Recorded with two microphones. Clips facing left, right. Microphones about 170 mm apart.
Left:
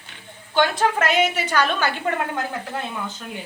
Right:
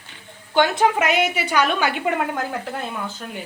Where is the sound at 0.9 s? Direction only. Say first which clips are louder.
Even; 10° right (ahead or behind).